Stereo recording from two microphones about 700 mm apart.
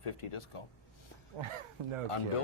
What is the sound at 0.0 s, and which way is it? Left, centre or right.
Speech, left.